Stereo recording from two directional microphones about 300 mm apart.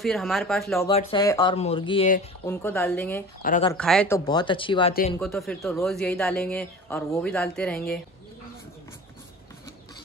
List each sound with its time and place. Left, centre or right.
0.0 s speech: centre
0.8 s speech: centre
3.4 s speech: left
3.7 s speech: centre
5.2 s speech: centre